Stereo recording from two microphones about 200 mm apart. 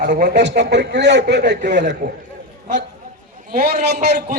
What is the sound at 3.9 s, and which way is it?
Speech, 55° right (ahead or behind).